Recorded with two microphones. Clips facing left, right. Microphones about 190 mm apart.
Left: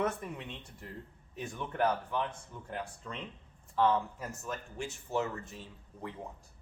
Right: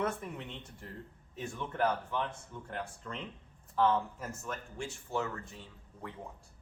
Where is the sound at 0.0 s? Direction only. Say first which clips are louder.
Left 1 dB; 10° left (ahead or behind).